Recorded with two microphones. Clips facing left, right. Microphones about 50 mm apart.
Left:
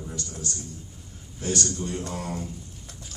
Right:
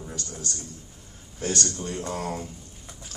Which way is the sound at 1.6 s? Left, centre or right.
Right.